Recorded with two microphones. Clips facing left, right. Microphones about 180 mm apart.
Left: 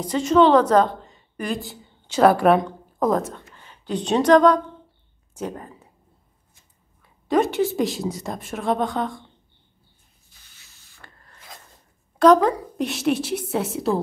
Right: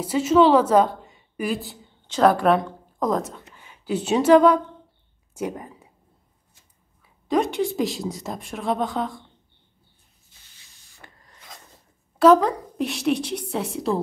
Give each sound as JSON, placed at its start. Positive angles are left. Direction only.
{"t": 0.0, "sound": "a woman's voice", "side_deg": -5}
{"t": 3.5, "sound": "speech", "side_deg": -10}
{"t": 7.0, "sound": "a woman's voice", "side_deg": 0}
{"t": 11.0, "sound": "rub", "side_deg": -15}
{"t": 12.2, "sound": "a woman's voice", "side_deg": -5}